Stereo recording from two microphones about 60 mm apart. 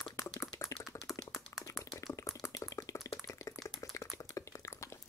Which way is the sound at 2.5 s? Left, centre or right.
Left.